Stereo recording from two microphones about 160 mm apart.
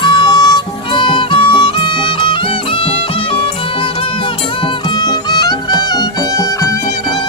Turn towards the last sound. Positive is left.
turn(degrees=25)  # may be behind; listen again after turning